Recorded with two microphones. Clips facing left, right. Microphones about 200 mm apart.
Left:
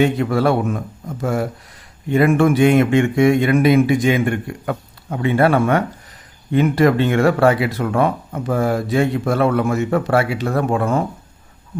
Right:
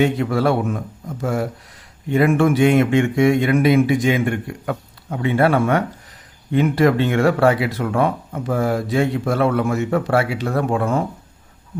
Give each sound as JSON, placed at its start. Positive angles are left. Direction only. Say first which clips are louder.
{"t": 0.0, "sound": "speech", "louder": "left 1 dB", "side_deg": 50}